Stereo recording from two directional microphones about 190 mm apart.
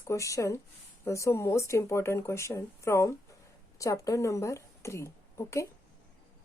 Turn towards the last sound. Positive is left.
turn(degrees=15)  # may be behind; listen again after turning